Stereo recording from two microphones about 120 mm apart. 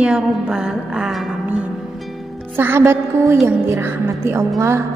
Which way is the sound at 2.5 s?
20° right (ahead or behind).